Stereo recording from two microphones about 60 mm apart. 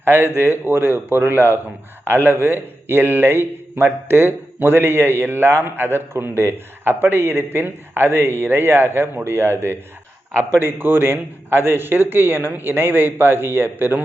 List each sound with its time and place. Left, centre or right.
0.0 s a man's voice: right
10.6 s a man's voice: right